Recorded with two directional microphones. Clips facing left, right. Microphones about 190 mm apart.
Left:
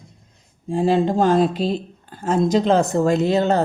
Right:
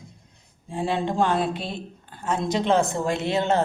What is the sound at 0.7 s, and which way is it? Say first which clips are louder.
Speech: left 8 dB; 40° left (ahead or behind).